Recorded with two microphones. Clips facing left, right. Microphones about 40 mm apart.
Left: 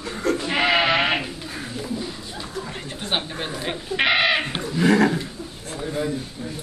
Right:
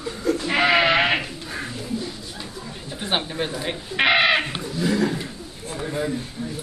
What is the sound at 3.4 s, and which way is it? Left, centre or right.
Speech, centre.